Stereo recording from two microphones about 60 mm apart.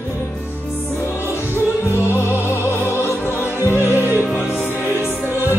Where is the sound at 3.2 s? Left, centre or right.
Left.